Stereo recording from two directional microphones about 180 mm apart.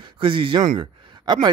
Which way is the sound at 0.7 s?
25° right (ahead or behind).